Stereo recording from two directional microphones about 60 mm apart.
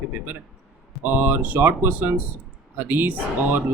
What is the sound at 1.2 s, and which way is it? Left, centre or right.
Speech, right.